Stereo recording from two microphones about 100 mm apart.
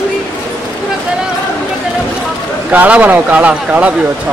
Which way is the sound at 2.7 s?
15° right (ahead or behind).